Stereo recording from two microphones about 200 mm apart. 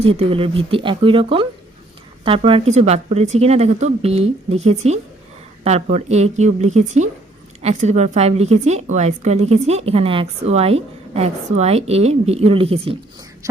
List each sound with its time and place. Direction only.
0.0 s a woman's voice: 30° right (ahead or behind)